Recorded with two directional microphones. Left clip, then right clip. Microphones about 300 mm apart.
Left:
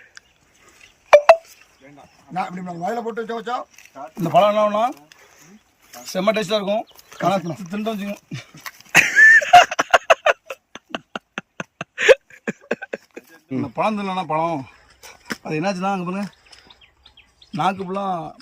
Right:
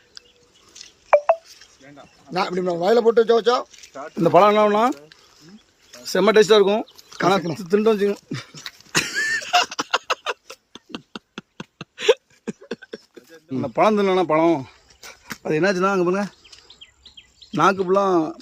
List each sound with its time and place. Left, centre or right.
2.3 s a man's voice: right
6.1 s speech: centre
9.0 s a sound: centre
14.0 s speech: centre
17.5 s a man's voice: centre